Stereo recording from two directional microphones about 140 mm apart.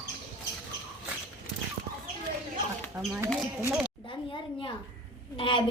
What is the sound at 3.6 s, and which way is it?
Speech, 10° right (ahead or behind).